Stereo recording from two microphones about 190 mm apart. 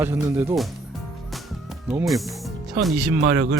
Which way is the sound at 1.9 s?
Centre (ahead or behind).